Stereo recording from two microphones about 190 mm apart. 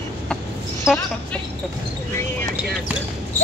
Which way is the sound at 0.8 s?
Centre (ahead or behind).